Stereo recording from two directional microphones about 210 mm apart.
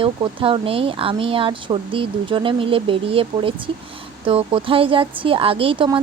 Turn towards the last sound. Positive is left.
turn(degrees=-25)  # may be behind; listen again after turning